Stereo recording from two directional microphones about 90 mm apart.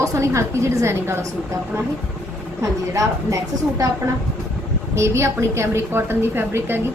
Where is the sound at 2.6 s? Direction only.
35° right (ahead or behind).